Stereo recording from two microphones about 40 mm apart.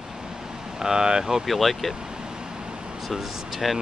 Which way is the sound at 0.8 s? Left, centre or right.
Centre.